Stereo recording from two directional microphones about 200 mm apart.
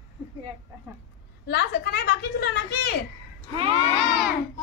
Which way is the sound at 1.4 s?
55° left (ahead or behind).